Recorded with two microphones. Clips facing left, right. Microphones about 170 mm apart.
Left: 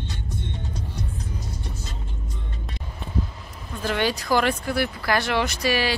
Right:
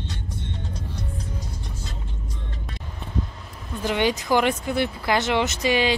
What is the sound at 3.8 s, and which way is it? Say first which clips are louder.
Speech: right 2 dB; 15° right (ahead or behind).